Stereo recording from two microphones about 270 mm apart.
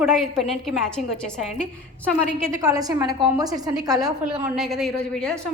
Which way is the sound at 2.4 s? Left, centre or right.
Centre.